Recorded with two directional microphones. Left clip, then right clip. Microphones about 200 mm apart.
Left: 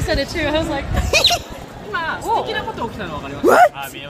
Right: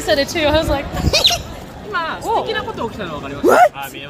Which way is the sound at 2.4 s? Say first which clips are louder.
Right 2 dB; centre (ahead or behind).